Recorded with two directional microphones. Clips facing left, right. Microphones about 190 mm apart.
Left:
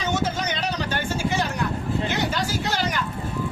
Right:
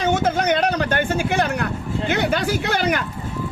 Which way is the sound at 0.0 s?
55° right (ahead or behind).